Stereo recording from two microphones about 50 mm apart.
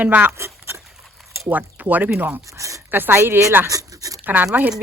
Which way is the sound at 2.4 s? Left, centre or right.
Right.